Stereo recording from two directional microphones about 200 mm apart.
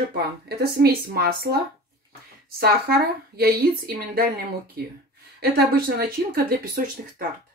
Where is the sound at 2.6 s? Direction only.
50° right (ahead or behind).